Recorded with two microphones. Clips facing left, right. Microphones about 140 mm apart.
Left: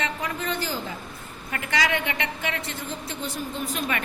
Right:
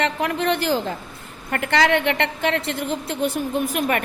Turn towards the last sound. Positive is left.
turn(degrees=-55)  # may be behind; listen again after turning